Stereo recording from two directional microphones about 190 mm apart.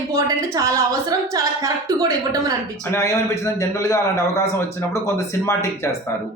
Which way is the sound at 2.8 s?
15° left (ahead or behind).